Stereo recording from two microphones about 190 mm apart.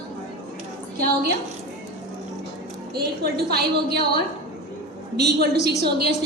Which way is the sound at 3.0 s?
55° right (ahead or behind).